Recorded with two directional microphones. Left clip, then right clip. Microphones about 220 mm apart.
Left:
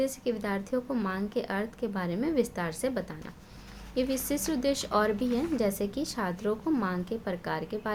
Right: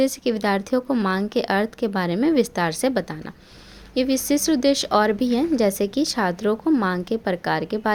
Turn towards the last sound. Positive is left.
turn(degrees=-35)  # may be behind; listen again after turning